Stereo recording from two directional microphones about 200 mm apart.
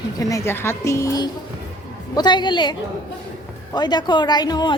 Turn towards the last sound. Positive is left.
turn(degrees=20)  # may be behind; listen again after turning